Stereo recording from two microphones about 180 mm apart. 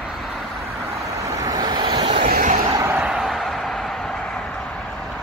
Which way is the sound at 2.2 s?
50° right (ahead or behind).